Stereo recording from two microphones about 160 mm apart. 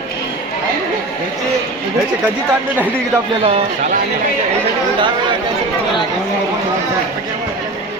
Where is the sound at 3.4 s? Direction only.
35° right (ahead or behind).